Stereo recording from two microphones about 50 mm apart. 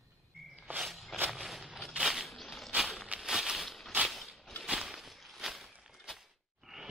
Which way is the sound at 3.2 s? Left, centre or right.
Centre.